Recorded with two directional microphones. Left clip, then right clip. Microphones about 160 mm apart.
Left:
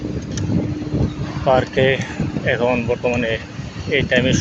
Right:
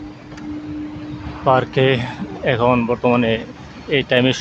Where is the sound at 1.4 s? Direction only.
30° right (ahead or behind).